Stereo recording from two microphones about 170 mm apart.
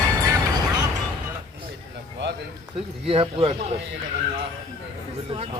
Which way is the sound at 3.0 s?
35° right (ahead or behind).